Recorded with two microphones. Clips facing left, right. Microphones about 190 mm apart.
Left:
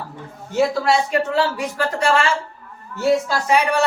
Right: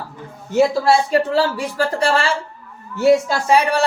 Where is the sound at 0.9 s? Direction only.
30° right (ahead or behind).